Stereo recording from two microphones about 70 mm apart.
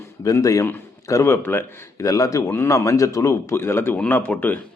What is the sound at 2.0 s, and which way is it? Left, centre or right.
Speech, left.